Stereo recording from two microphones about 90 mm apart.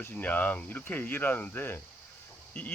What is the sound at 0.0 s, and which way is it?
Speech, 20° left (ahead or behind).